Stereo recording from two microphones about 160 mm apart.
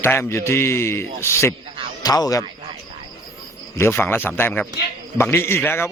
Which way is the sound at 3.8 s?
15° left (ahead or behind).